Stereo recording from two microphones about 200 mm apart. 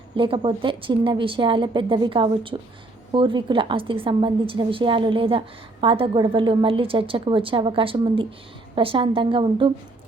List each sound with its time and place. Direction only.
0.2 s a woman's voice: 25° right (ahead or behind)